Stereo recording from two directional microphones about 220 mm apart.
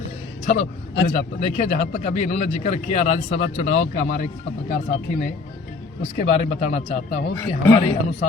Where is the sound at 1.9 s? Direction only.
35° left (ahead or behind).